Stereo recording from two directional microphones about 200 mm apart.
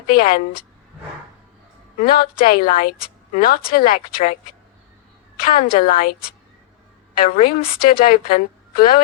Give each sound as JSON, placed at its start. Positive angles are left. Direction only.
{"t": 0.1, "sound": "speech", "side_deg": 45}
{"t": 2.0, "sound": "speech", "side_deg": 45}
{"t": 5.4, "sound": "speech", "side_deg": 45}